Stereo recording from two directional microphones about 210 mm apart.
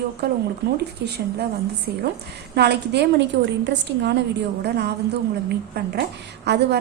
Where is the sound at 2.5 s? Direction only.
50° right (ahead or behind).